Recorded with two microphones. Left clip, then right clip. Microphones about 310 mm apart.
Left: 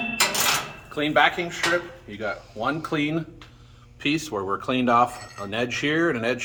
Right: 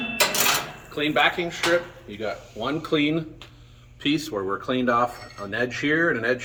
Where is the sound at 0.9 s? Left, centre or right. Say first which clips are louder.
Left 1 dB; centre.